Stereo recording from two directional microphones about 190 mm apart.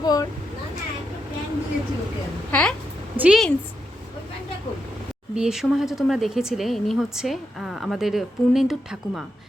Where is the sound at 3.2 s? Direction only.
5° right (ahead or behind).